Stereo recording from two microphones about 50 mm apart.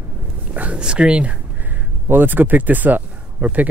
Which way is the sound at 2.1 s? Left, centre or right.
Right.